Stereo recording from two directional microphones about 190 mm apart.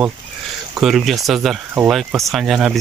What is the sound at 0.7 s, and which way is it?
Speech, 5° right (ahead or behind).